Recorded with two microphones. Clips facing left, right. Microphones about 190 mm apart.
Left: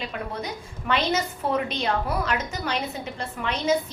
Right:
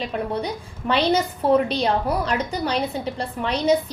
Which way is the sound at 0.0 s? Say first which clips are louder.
Right 6 dB; 35° right (ahead or behind).